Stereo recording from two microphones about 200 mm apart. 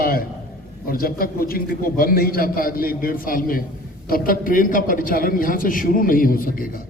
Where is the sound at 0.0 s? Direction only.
50° left (ahead or behind).